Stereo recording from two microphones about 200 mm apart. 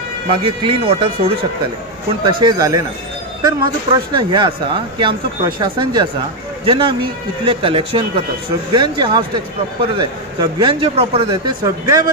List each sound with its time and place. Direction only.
0.3 s speech: 25° right (ahead or behind)